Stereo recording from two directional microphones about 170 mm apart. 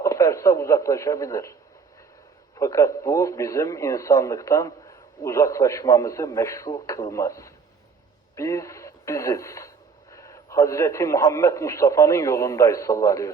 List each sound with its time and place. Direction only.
0.0 s speech: 20° left (ahead or behind)
2.6 s speech: 20° left (ahead or behind)